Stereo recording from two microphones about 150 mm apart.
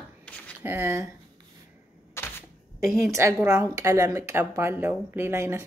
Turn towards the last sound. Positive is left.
turn(degrees=-15)  # may be behind; listen again after turning